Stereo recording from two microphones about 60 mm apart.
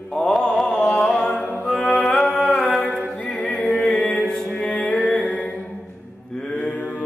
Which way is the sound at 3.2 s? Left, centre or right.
Left.